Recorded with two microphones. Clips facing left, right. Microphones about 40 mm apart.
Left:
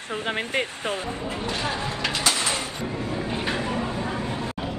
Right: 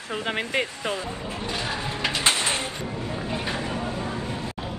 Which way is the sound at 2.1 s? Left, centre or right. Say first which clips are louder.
Right 2 dB; right.